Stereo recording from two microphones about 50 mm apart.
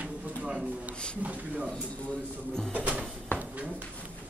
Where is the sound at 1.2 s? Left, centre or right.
Right.